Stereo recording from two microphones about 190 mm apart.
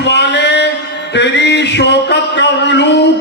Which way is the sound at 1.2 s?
65° left (ahead or behind).